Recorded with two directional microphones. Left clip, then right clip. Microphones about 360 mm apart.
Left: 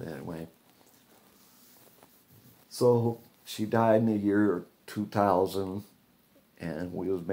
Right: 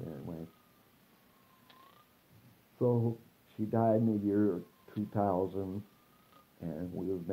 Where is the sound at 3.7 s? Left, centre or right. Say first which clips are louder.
Left 6 dB; left.